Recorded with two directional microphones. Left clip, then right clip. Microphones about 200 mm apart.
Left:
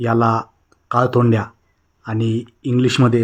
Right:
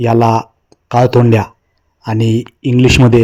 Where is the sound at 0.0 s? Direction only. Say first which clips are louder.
Right 6 dB; 20° right (ahead or behind).